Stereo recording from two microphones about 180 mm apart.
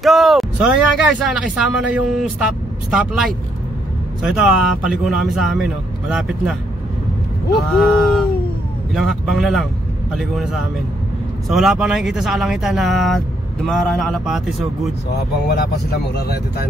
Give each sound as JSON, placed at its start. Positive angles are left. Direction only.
{"t": 0.0, "sound": "speech", "side_deg": 0}
{"t": 7.5, "sound": "speech", "side_deg": 0}
{"t": 15.4, "sound": "speech", "side_deg": 60}